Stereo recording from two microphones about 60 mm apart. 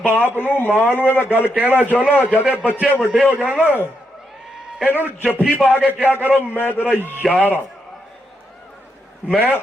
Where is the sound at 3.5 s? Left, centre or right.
Left.